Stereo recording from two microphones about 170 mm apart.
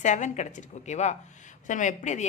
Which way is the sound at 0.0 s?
45° left (ahead or behind).